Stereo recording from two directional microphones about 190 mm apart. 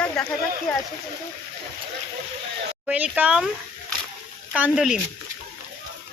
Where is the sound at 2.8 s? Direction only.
5° right (ahead or behind).